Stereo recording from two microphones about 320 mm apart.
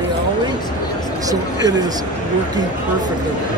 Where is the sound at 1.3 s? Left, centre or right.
Centre.